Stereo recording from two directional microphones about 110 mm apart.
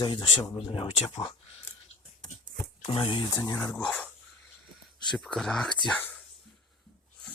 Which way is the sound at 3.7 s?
5° left (ahead or behind).